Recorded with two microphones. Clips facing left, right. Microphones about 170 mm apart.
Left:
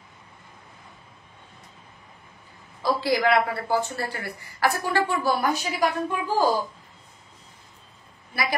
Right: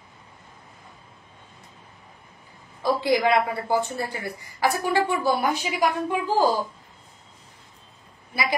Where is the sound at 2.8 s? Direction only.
20° right (ahead or behind).